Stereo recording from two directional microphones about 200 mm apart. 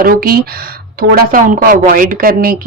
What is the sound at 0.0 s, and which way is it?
Speech, 45° right (ahead or behind).